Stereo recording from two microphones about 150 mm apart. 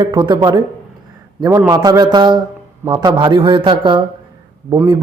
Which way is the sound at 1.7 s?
25° right (ahead or behind).